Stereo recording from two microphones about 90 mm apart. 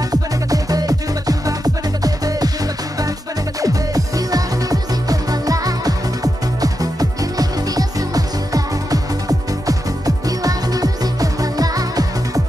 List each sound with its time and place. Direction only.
0.1 s music: 45° right (ahead or behind)
3.6 s music: 40° right (ahead or behind)